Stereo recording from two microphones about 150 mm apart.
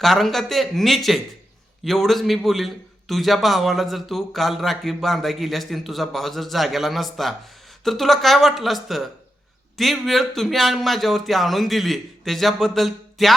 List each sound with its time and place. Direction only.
0.0 s a man's voice: centre (ahead or behind)